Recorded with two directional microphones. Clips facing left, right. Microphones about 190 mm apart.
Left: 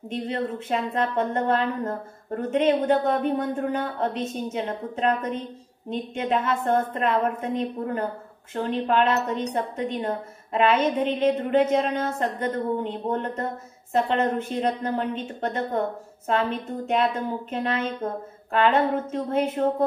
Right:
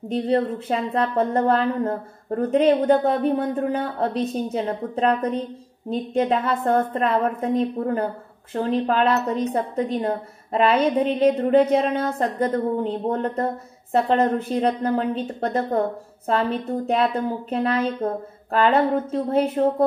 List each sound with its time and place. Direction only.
0.1 s a woman's voice: 35° right (ahead or behind)